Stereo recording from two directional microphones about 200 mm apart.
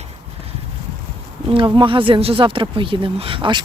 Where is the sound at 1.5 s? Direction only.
25° right (ahead or behind).